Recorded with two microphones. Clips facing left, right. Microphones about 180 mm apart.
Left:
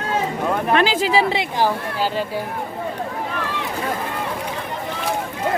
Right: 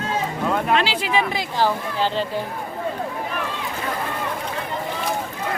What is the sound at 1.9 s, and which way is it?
Speech, 10° left (ahead or behind).